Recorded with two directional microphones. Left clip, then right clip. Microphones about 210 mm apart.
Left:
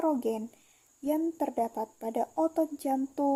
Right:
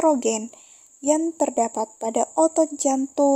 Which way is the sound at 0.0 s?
40° right (ahead or behind).